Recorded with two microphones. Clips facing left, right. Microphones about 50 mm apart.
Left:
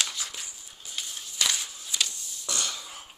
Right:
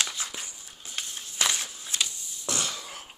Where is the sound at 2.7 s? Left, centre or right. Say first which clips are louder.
Right 2 dB; right.